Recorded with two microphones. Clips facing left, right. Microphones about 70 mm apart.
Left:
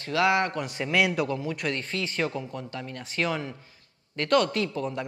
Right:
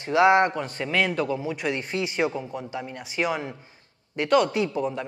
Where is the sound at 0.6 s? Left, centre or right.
Centre.